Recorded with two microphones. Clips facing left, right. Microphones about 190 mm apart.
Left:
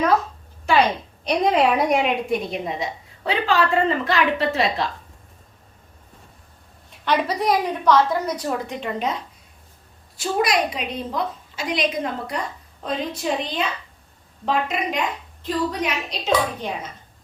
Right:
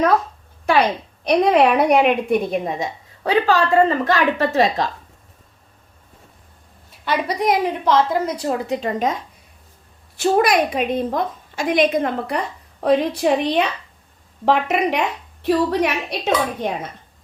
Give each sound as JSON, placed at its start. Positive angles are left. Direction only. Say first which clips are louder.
{"t": 1.3, "sound": "a woman's voice", "louder": "right 4 dB", "side_deg": -65}
{"t": 7.0, "sound": "a woman's voice", "louder": "right 1 dB", "side_deg": -10}
{"t": 10.2, "sound": "a woman's voice", "louder": "right 5 dB", "side_deg": -55}
{"t": 12.8, "sound": "a woman's voice", "louder": "right 9 dB", "side_deg": -65}